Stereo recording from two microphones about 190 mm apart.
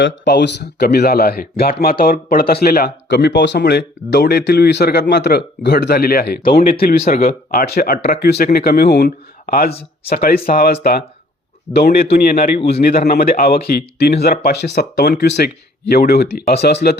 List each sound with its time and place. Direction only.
0.0 s speech: 65° left (ahead or behind)
7.1 s speech: 40° left (ahead or behind)
7.6 s speech: 55° left (ahead or behind)